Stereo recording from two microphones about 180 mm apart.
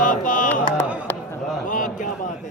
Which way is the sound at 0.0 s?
50° left (ahead or behind).